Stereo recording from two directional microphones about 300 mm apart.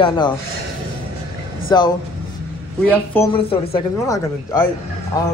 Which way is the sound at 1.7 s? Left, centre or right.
Centre.